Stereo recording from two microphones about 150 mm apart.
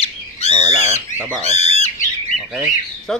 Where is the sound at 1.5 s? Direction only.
45° left (ahead or behind).